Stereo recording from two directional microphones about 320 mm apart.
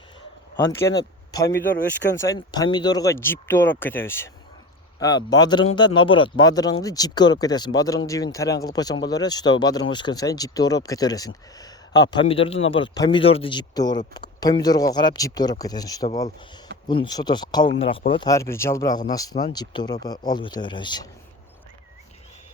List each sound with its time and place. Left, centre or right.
0.5 s speech: centre
11.5 s a sound: centre
12.1 s speech: centre